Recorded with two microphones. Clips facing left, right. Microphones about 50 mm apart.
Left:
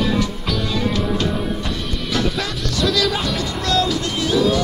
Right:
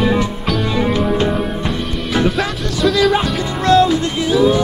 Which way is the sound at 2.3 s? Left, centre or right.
Centre.